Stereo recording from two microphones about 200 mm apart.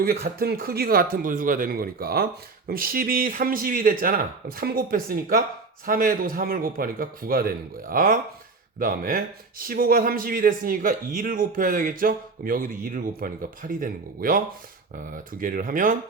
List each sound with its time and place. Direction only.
0.0 s speech: 50° right (ahead or behind)